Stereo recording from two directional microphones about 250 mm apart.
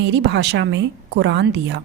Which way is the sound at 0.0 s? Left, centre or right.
Right.